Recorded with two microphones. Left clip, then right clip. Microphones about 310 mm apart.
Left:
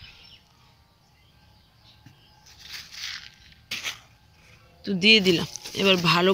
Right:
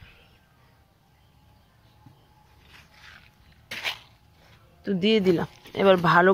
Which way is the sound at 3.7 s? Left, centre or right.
Right.